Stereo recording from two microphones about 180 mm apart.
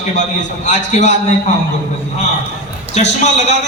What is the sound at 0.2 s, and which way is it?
Speech, 40° left (ahead or behind).